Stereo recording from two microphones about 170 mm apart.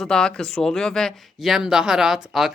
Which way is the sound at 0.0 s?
5° left (ahead or behind).